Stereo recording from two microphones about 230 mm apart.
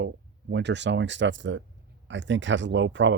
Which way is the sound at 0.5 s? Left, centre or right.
Right.